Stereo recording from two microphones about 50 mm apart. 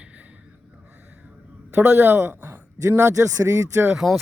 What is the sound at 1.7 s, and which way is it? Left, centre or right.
Speech, right.